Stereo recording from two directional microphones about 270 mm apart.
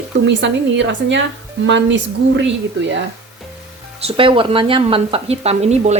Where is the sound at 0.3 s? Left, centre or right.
Right.